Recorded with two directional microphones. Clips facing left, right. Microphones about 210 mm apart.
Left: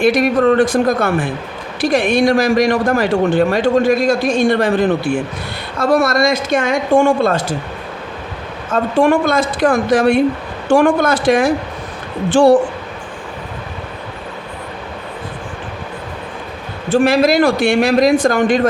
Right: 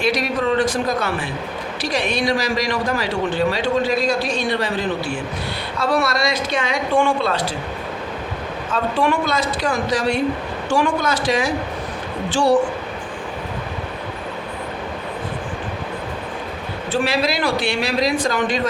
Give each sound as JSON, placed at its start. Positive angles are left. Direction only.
{"t": 0.0, "sound": "a man's voice", "side_deg": 50}
{"t": 8.7, "sound": "a man's voice", "side_deg": 50}
{"t": 16.9, "sound": "a man's voice", "side_deg": 50}